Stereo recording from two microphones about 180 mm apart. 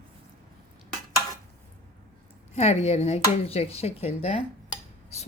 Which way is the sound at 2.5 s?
35° left (ahead or behind).